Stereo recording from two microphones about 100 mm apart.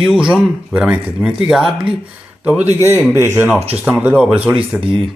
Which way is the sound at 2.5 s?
20° right (ahead or behind).